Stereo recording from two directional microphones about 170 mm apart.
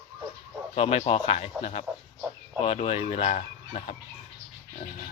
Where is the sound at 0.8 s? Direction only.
35° left (ahead or behind).